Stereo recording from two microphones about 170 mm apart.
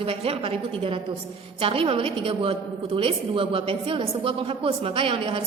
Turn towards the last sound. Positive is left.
turn(degrees=-30)  # may be behind; listen again after turning